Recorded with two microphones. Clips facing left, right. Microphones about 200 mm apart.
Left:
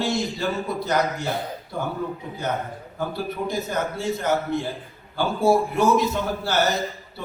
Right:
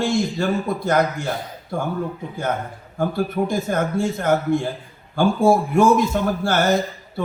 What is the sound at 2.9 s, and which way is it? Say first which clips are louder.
A man's voice: right 7 dB; 50° right (ahead or behind).